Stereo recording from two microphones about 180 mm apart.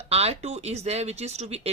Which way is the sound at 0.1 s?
35° right (ahead or behind).